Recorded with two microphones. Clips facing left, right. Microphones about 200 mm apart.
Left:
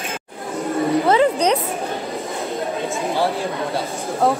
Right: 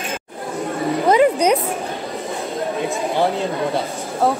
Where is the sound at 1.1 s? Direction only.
10° right (ahead or behind).